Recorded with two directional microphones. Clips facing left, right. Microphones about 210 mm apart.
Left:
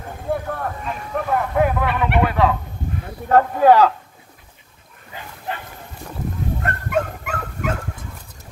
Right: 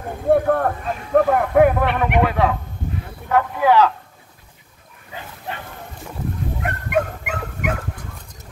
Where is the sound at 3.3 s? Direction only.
40° left (ahead or behind).